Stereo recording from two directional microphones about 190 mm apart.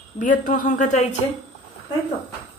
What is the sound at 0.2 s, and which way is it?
Speech, 45° left (ahead or behind).